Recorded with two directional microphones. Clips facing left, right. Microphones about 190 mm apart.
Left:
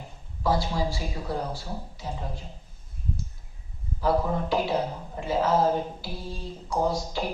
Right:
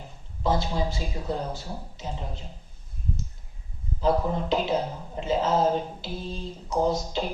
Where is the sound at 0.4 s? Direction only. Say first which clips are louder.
Even; 20° right (ahead or behind).